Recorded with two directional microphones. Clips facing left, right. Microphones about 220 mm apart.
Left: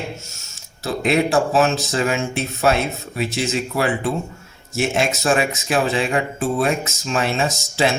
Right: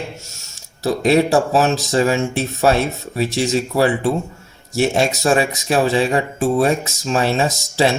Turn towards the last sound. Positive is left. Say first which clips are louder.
# right 3 dB
turn(degrees=-35)  # may be behind; listen again after turning